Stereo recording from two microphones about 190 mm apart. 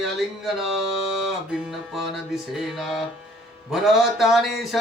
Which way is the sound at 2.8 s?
Centre (ahead or behind).